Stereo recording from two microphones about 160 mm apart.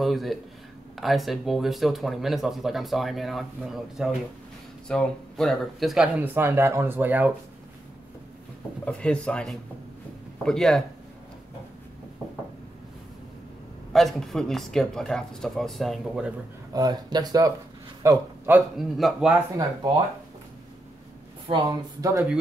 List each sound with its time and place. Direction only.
0.0 s speech: centre (ahead or behind)
8.8 s speech: 5° left (ahead or behind)
13.9 s speech: centre (ahead or behind)
16.7 s a woman's voice: 25° right (ahead or behind)
18.8 s speech: centre (ahead or behind)
21.5 s a woman's voice: 25° right (ahead or behind)